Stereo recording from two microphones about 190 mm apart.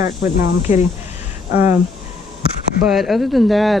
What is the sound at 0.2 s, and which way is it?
Speech, 40° left (ahead or behind).